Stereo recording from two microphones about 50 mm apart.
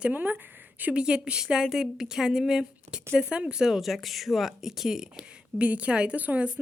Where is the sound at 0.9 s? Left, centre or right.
Right.